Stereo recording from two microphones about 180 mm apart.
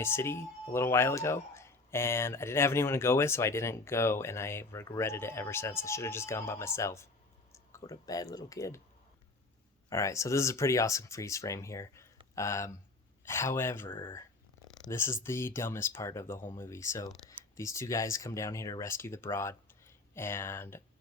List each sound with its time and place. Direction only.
0.0 s speech: 15° left (ahead or behind)
9.9 s speech: 15° left (ahead or behind)